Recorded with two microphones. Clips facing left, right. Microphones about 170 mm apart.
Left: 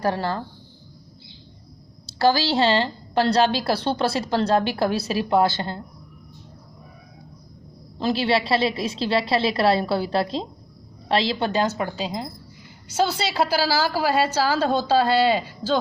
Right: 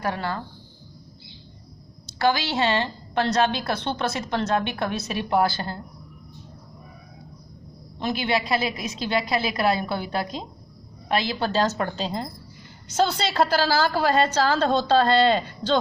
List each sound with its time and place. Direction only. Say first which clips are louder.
0.0 s a woman's voice: left 4 dB; 35° left (ahead or behind)
2.0 s a woman's voice: left 3 dB; 35° left (ahead or behind)
7.9 s a woman's voice: left 3 dB; 30° left (ahead or behind); by 15.8 s 5° left (ahead or behind)